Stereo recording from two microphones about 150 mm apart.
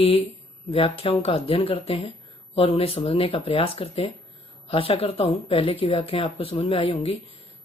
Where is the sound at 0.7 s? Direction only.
40° left (ahead or behind).